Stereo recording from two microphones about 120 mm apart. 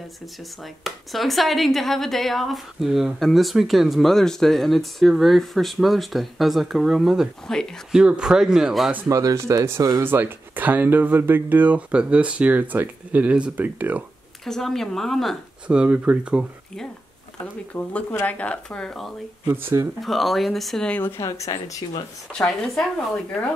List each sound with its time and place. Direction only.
0.8 s speech: centre (ahead or behind)
9.0 s speech: 30° right (ahead or behind)
10.0 s speech: 15° right (ahead or behind)
14.4 s speech: 5° left (ahead or behind)
15.6 s speech: 10° right (ahead or behind)
17.7 s speech: 10° left (ahead or behind)
19.4 s speech: 20° right (ahead or behind)
20.0 s speech: centre (ahead or behind)
21.2 s speech: 25° left (ahead or behind)
22.3 s speech: centre (ahead or behind)